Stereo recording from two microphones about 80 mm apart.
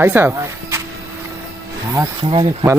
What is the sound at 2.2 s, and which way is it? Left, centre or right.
Speech, right.